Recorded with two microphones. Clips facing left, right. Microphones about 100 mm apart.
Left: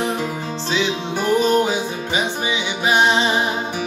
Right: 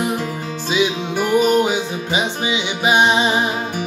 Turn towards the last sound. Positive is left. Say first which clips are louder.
# right 1 dB
turn(degrees=-15)  # may be behind; listen again after turning